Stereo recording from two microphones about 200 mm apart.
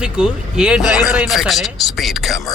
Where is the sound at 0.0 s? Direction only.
5° right (ahead or behind).